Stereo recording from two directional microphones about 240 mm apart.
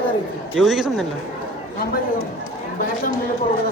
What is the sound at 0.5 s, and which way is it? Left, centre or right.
Speech, centre.